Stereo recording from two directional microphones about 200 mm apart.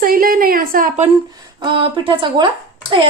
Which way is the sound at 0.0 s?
45° right (ahead or behind).